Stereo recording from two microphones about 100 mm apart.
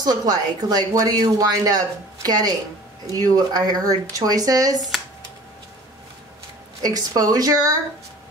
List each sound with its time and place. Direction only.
0.0 s speech: 40° right (ahead or behind)
6.8 s speech: 40° right (ahead or behind)